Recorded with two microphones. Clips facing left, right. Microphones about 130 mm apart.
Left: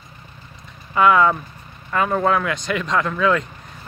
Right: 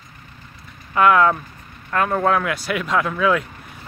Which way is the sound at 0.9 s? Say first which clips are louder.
Even; centre (ahead or behind).